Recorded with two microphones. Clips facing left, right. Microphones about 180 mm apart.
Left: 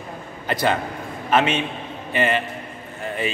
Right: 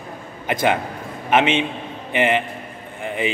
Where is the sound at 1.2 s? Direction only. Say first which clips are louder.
Right 2 dB; 20° right (ahead or behind).